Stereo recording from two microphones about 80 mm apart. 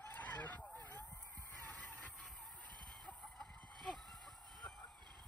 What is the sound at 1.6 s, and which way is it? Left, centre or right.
Honk, centre.